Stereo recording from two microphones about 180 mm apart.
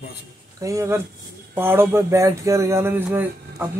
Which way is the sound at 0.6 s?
15° right (ahead or behind).